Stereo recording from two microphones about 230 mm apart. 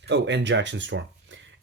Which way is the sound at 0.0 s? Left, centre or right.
Right.